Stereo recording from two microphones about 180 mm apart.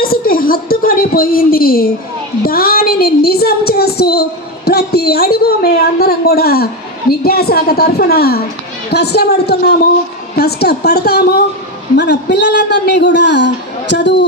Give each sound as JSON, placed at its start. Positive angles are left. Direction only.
{"t": 0.0, "sound": "a sound", "side_deg": 55}
{"t": 2.4, "sound": "a woman's voice", "side_deg": 55}
{"t": 11.9, "sound": "speech", "side_deg": 70}